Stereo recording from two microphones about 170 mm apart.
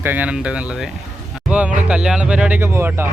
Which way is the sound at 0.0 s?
10° right (ahead or behind).